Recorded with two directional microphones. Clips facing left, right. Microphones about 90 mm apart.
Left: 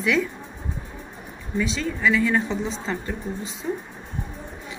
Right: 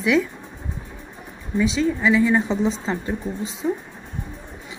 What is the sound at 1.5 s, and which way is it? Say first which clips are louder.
Speech: right 5 dB; 15° right (ahead or behind).